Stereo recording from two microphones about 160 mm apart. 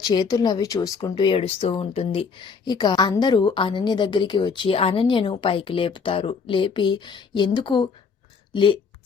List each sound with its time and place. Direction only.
0.0 s speech: 25° left (ahead or behind)